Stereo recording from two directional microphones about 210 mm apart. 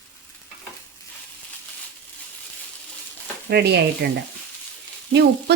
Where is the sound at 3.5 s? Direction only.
50° right (ahead or behind).